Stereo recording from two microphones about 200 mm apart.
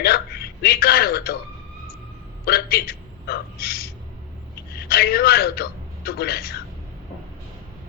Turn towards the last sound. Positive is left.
turn(degrees=50)  # may be behind; listen again after turning